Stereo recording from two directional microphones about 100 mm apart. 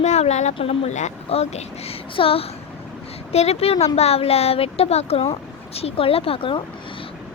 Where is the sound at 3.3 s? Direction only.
90° left.